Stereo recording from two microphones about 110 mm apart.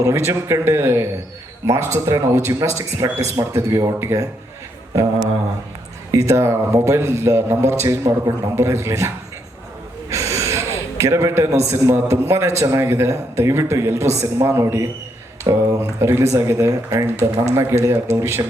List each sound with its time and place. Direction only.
0.0 s a man's voice: 25° right (ahead or behind)